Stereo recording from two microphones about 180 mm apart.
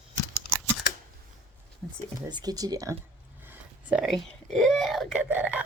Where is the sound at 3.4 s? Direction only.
10° right (ahead or behind).